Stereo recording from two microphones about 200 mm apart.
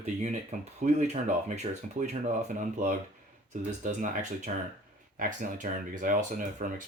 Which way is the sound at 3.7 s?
40° right (ahead or behind).